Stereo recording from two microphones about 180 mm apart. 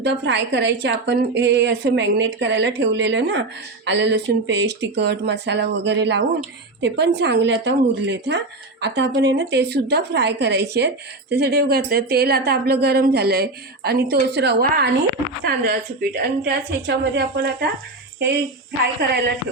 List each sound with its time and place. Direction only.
0.0 s a woman's voice: 75° right (ahead or behind)